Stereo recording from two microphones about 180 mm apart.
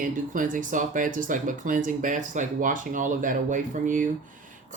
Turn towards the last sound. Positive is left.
turn(degrees=-45)  # may be behind; listen again after turning